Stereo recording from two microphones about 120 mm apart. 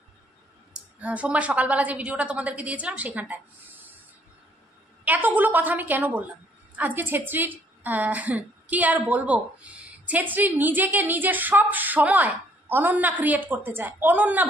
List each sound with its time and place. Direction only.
0.7 s a woman's voice: 10° right (ahead or behind)
5.0 s a woman's voice: 15° right (ahead or behind)